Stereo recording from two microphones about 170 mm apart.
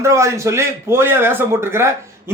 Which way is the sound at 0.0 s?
15° right (ahead or behind).